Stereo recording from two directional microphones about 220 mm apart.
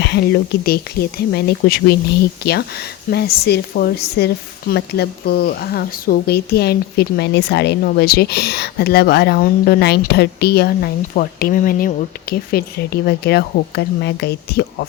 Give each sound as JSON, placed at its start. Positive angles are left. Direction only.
{"t": 0.0, "sound": "speech", "side_deg": 50}